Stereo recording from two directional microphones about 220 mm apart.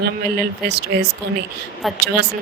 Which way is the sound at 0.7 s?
45° right (ahead or behind).